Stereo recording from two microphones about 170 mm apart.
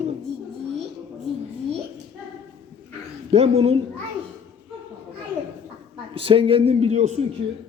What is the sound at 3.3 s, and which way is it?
Speech, 35° right (ahead or behind).